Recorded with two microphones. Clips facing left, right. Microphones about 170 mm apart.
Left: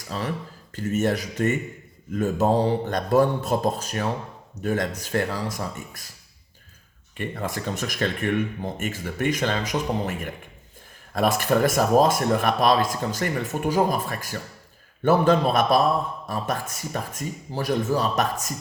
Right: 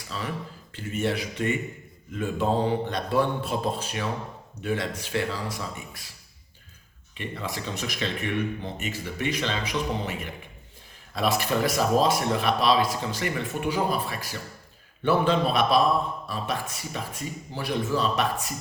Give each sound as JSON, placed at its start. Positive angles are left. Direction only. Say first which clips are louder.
{"t": 0.1, "sound": "speech", "louder": "left 4 dB", "side_deg": 45}
{"t": 7.2, "sound": "speech", "louder": "left 4 dB", "side_deg": 50}